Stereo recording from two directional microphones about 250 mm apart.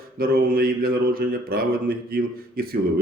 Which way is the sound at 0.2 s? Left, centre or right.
Right.